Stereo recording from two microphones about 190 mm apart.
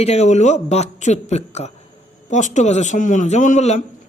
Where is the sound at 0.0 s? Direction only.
35° left (ahead or behind).